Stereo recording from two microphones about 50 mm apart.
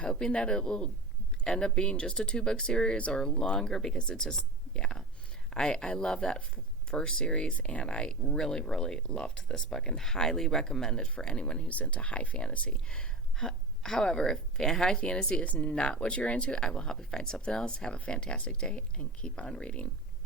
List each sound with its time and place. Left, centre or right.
0.1 s speech: centre
11.7 s speech: left